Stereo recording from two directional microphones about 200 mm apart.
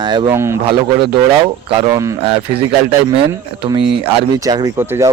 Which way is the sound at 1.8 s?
20° right (ahead or behind).